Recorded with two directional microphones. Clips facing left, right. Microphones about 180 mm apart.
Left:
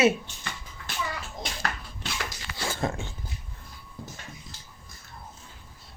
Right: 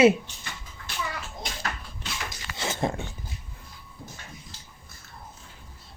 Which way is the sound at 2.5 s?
20° right (ahead or behind).